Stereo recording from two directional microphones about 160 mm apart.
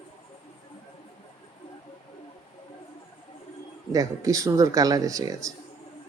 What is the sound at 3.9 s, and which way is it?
Speech, 20° right (ahead or behind).